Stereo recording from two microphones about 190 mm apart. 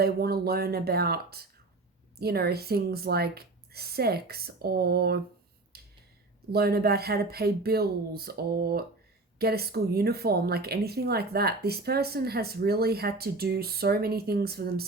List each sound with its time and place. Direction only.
0.0 s speech: 55° right (ahead or behind)
5.7 s a sound: 55° right (ahead or behind)
6.5 s speech: 55° right (ahead or behind)